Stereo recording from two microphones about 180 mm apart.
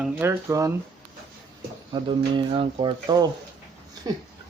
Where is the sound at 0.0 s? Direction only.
15° right (ahead or behind).